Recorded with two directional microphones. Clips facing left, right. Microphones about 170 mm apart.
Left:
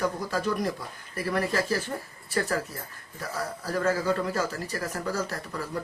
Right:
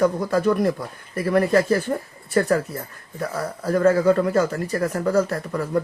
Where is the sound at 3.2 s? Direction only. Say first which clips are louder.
Right 6 dB; 55° right (ahead or behind).